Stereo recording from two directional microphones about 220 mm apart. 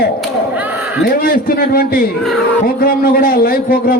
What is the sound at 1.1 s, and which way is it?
A man's voice, 45° left (ahead or behind).